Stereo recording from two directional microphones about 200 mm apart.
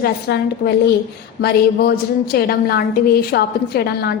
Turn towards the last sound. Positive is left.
turn(degrees=50)  # may be behind; listen again after turning